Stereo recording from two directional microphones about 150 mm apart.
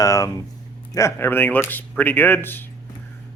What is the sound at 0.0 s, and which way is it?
Speech, 25° left (ahead or behind).